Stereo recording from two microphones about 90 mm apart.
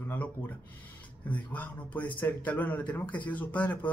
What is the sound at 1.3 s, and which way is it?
Speech, 15° left (ahead or behind).